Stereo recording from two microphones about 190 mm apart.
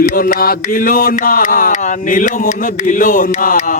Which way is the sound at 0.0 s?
45° left (ahead or behind).